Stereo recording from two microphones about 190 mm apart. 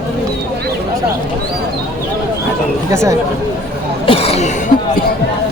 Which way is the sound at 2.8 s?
15° right (ahead or behind).